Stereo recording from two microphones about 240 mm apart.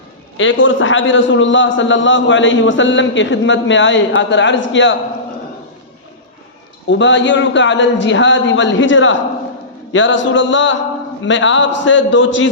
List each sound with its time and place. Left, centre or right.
0.3 s a man's voice: left
6.9 s a man's voice: left